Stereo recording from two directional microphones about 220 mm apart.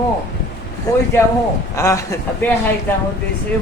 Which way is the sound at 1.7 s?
15° left (ahead or behind).